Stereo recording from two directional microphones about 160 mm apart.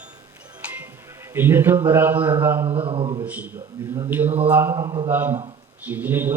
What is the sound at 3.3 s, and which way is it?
A man's voice, 10° right (ahead or behind).